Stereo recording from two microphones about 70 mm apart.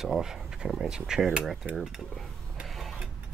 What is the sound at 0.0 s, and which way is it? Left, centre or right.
Speech, centre.